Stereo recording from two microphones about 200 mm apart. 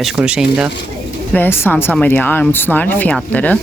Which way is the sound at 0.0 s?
5° right (ahead or behind).